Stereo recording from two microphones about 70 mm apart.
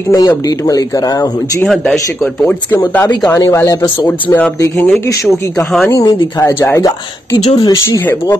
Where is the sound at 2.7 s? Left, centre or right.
Left.